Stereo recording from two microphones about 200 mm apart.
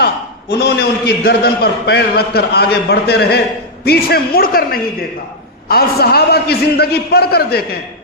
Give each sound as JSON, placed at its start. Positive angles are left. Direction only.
{"t": 0.0, "sound": "a man's voice", "side_deg": 55}